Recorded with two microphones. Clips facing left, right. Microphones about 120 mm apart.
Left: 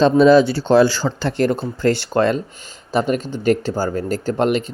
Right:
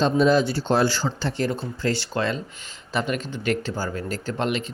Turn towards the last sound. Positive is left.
turn(degrees=45)  # may be behind; listen again after turning